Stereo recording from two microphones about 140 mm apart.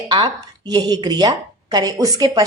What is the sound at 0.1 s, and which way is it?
A woman's voice, 30° right (ahead or behind).